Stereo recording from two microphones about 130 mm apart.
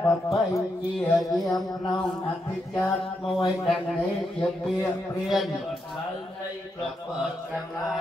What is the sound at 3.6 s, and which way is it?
Mantra, centre (ahead or behind).